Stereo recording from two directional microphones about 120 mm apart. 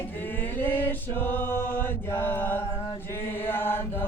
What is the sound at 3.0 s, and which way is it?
Chant, 20° left (ahead or behind).